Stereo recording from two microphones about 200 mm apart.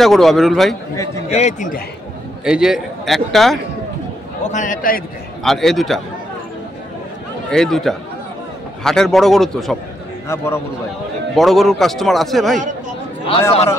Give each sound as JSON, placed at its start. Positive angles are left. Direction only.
{"t": 0.0, "sound": "a man's voice", "side_deg": 0}
{"t": 1.3, "sound": "a man's voice", "side_deg": 35}
{"t": 2.4, "sound": "a man's voice", "side_deg": -5}
{"t": 4.4, "sound": "a man's voice", "side_deg": 40}
{"t": 5.4, "sound": "a man's voice", "side_deg": 0}
{"t": 7.5, "sound": "a man's voice", "side_deg": 0}
{"t": 10.2, "sound": "a man's voice", "side_deg": 15}
{"t": 11.3, "sound": "a man's voice", "side_deg": 0}